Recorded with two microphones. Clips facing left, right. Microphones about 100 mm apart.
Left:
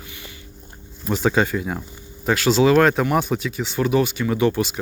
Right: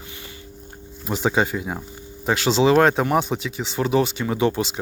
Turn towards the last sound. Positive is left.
turn(degrees=-25)  # may be behind; listen again after turning